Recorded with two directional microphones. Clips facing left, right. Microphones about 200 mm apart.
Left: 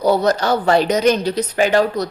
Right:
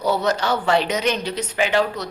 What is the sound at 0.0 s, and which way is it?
A woman's voice, 40° left (ahead or behind).